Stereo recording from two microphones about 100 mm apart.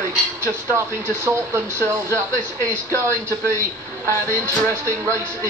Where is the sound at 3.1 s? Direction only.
30° right (ahead or behind).